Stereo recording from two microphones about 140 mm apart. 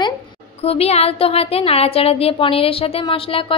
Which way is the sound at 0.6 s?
45° left (ahead or behind).